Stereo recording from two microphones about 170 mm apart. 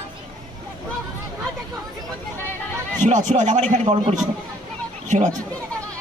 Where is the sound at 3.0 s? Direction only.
45° right (ahead or behind).